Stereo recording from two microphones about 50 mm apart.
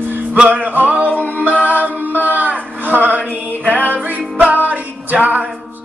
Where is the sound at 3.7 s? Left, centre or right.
Right.